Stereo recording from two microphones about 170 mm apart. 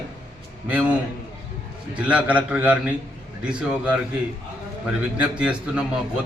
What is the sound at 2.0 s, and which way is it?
A man's voice, 5° right (ahead or behind).